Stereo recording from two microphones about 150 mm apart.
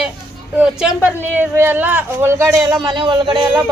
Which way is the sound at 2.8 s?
30° right (ahead or behind).